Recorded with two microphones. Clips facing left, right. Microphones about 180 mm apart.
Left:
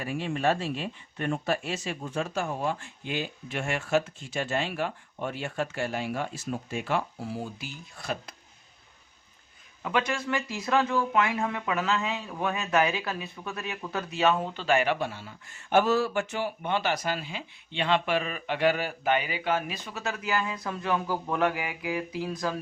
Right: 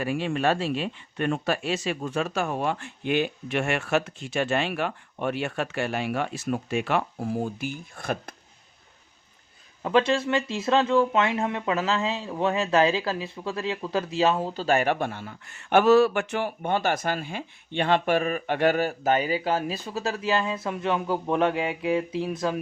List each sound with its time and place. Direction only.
0.0 s speech: 80° right
7.3 s speech: 50° right (ahead or behind)
9.8 s speech: 30° right (ahead or behind)